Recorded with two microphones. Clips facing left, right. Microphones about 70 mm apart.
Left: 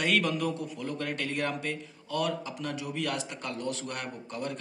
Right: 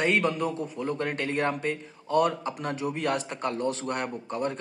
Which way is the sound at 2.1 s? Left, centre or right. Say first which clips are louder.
Right 7 dB; right.